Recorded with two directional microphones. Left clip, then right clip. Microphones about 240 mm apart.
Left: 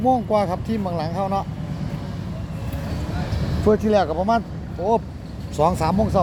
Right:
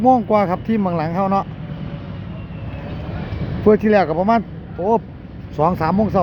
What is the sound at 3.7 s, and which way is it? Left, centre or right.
Speech, right.